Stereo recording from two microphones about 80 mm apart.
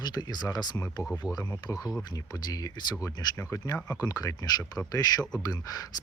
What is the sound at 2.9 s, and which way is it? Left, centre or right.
Speech, left.